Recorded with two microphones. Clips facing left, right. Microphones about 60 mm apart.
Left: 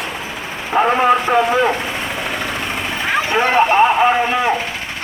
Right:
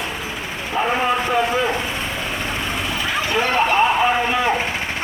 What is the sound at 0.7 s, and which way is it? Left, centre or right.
Speech, left.